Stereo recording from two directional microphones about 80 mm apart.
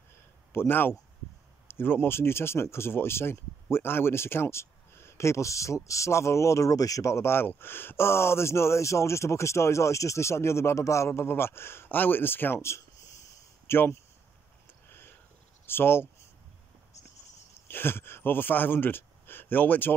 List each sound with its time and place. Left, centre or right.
0.5 s a man's voice: left
14.7 s a sound: left
15.6 s speech: left
17.6 s speech: left